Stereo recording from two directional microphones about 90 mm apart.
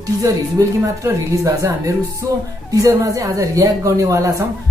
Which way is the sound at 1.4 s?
35° right (ahead or behind).